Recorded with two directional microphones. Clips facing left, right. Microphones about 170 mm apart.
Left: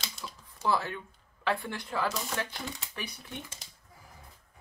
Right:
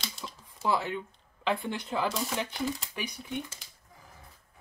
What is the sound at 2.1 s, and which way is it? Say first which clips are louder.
Speech: right 3 dB; centre (ahead or behind).